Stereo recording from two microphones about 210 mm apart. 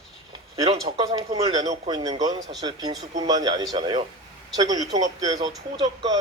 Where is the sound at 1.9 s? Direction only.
20° right (ahead or behind).